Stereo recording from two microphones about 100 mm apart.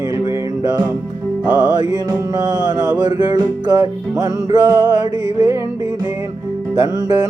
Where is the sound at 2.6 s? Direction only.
45° right (ahead or behind).